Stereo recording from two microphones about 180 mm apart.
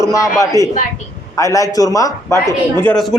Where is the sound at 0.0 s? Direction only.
15° left (ahead or behind).